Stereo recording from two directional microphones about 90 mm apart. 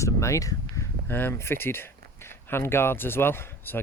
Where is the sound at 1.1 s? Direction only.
25° left (ahead or behind).